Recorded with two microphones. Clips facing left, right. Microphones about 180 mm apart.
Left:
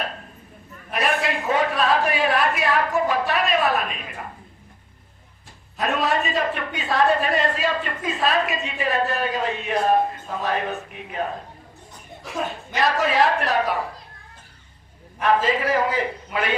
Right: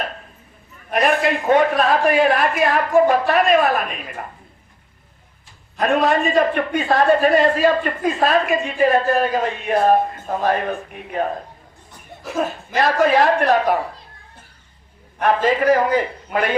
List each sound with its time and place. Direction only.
0.9 s a man's voice: 50° right (ahead or behind)
5.8 s a man's voice: 50° right (ahead or behind)
12.4 s a man's voice: 50° right (ahead or behind)
15.2 s a man's voice: 45° right (ahead or behind)